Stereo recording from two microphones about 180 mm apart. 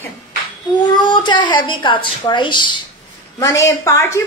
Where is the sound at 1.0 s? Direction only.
25° left (ahead or behind).